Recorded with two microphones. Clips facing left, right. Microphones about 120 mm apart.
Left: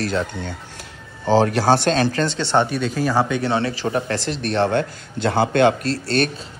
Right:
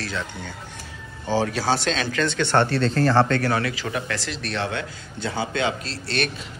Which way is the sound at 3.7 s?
35° left (ahead or behind).